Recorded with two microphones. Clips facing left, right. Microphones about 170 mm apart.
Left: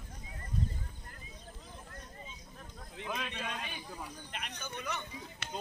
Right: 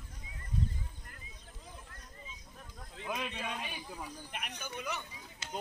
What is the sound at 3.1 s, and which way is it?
Speech, 5° right (ahead or behind).